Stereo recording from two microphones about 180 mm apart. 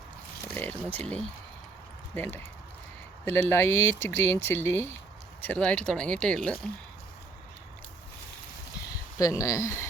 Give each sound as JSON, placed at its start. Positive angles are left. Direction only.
{"t": 0.5, "sound": "speech", "side_deg": 10}
{"t": 9.1, "sound": "speech", "side_deg": 20}